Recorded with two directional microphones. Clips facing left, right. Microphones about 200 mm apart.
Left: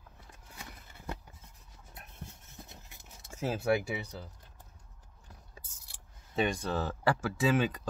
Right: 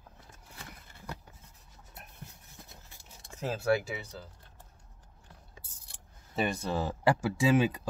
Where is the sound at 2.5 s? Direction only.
20° left (ahead or behind).